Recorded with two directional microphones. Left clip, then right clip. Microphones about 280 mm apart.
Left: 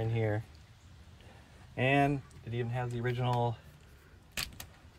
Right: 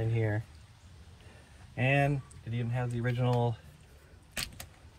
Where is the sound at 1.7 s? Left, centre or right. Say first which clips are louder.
Left 1 dB; left.